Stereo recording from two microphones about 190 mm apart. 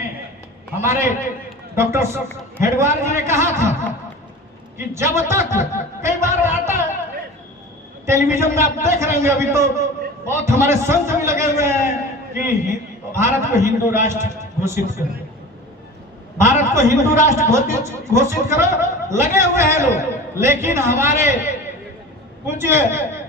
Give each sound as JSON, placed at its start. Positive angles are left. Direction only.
{"t": 0.8, "sound": "speech", "side_deg": -15}
{"t": 4.9, "sound": "speech", "side_deg": -15}
{"t": 8.0, "sound": "a man's voice", "side_deg": -15}
{"t": 16.4, "sound": "speech", "side_deg": -15}